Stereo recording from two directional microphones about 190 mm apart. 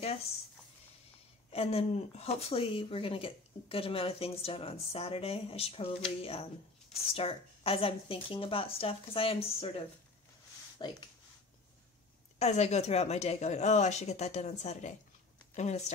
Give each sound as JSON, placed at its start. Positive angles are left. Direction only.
{"t": 1.5, "sound": "speech", "side_deg": 30}
{"t": 12.4, "sound": "speech", "side_deg": 35}